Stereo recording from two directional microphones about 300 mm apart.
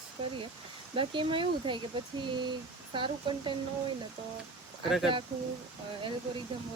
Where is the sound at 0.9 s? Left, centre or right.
Centre.